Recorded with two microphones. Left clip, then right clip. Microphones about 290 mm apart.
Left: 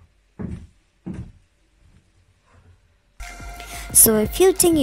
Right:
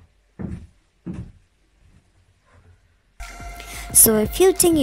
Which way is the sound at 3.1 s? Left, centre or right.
Centre.